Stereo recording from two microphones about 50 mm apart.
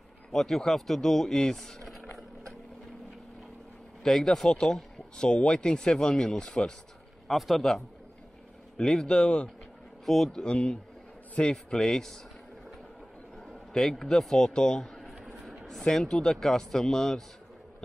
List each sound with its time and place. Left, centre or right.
0.3 s speech: centre
4.0 s speech: centre
7.2 s a man's voice: centre
8.7 s speech: centre
10.0 s a man's voice: centre
10.4 s speech: left
11.5 s speech: centre
13.5 s a man's voice: centre